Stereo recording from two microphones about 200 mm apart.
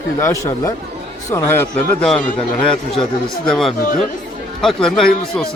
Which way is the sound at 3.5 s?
Centre (ahead or behind).